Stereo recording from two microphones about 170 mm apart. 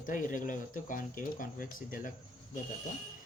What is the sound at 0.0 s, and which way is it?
Speech, 50° left (ahead or behind).